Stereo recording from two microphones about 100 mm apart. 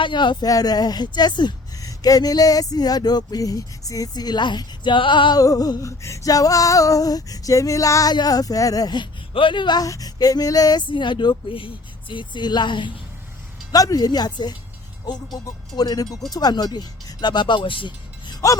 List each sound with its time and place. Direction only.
0.0 s speech: 50° left (ahead or behind)
0.4 s speech: 40° left (ahead or behind)
5.4 s speech: 35° left (ahead or behind)
9.3 s speech: 55° left (ahead or behind); by 10.8 s 40° left (ahead or behind)
10.8 s speech: 55° left (ahead or behind)
13.7 s speech: 40° left (ahead or behind)